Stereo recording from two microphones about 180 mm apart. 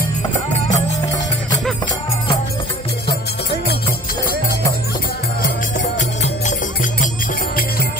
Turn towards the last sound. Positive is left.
turn(degrees=45)  # may be behind; listen again after turning